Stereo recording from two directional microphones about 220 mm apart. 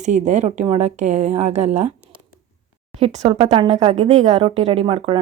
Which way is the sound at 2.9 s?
30° right (ahead or behind).